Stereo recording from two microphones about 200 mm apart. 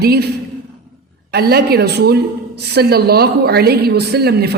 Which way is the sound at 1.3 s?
55° right (ahead or behind).